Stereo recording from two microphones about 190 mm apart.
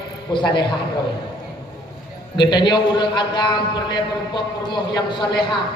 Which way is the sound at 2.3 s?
25° left (ahead or behind).